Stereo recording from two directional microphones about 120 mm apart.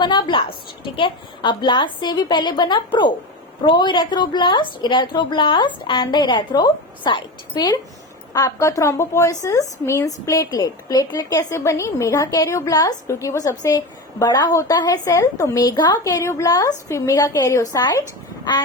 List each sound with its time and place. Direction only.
0.0 s a sound: 40° left (ahead or behind)
0.9 s a woman's voice: 40° left (ahead or behind)
8.3 s a woman's voice: 25° left (ahead or behind)